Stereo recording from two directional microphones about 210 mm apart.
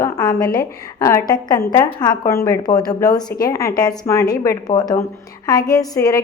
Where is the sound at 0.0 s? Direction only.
15° left (ahead or behind).